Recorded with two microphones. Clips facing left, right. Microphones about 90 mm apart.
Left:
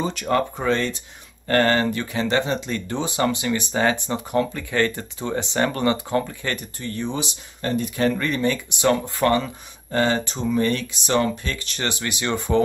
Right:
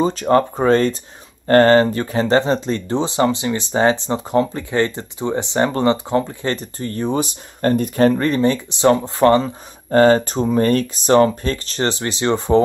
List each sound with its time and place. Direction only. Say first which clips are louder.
0.0 s speech: right 7 dB; 35° right (ahead or behind)
8.1 s speech: right 6 dB; 35° right (ahead or behind)
9.8 s speech: right 9 dB; 45° right (ahead or behind)